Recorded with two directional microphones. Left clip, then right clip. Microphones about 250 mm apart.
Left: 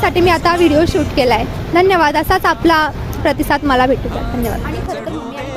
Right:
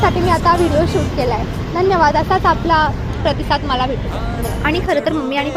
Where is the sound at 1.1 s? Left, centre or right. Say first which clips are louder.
Left 5 dB; left.